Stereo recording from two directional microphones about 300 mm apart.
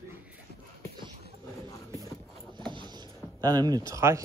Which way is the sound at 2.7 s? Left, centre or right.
Centre.